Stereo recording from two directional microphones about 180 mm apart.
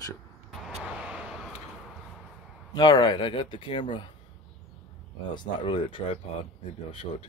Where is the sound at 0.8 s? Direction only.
5° right (ahead or behind).